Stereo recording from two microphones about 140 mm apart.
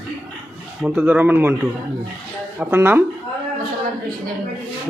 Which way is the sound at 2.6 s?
15° right (ahead or behind).